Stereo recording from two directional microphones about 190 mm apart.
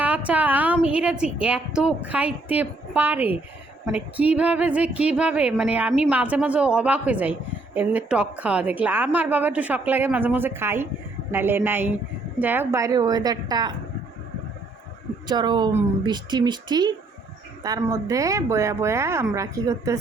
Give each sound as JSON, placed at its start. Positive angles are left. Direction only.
{"t": 0.0, "sound": "a sound", "side_deg": -5}
{"t": 0.9, "sound": "a woman's voice", "side_deg": -5}
{"t": 15.3, "sound": "a woman's voice", "side_deg": -20}